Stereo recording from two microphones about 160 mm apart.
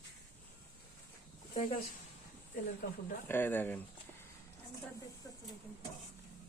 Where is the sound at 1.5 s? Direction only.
55° left (ahead or behind).